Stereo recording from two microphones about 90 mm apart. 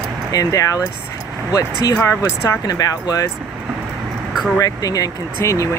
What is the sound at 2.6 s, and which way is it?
Speech, 45° left (ahead or behind).